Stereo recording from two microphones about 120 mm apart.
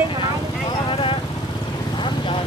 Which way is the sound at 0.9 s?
45° left (ahead or behind).